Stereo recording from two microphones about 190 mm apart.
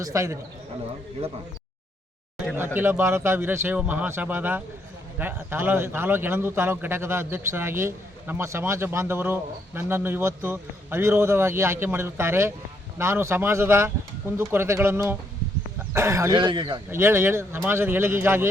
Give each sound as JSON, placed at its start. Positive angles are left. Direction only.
{"t": 0.0, "sound": "a man's voice", "side_deg": -15}
{"t": 2.6, "sound": "a man's voice", "side_deg": -10}
{"t": 16.9, "sound": "a man's voice", "side_deg": -15}